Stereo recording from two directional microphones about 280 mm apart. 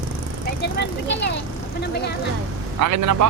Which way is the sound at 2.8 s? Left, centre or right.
Right.